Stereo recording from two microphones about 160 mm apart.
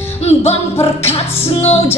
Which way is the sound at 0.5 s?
40° left (ahead or behind).